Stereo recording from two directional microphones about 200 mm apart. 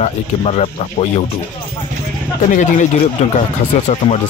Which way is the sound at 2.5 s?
35° left (ahead or behind).